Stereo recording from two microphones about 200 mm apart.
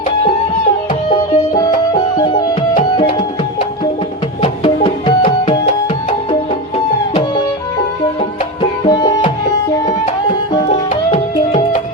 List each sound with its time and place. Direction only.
1.9 s music: 20° left (ahead or behind)
8.9 s music: 20° left (ahead or behind)
10.7 s music: 35° left (ahead or behind)